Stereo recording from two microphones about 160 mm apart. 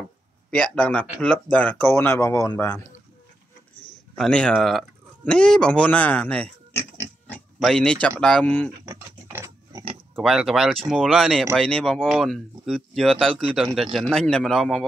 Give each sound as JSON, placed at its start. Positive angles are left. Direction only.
{"t": 0.5, "sound": "speech", "side_deg": 5}
{"t": 4.1, "sound": "speech", "side_deg": 5}
{"t": 8.8, "sound": "pig", "side_deg": -15}
{"t": 10.2, "sound": "speech", "side_deg": 0}